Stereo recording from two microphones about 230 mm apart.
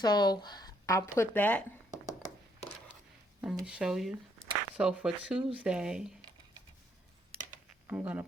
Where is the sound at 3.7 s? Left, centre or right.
Centre.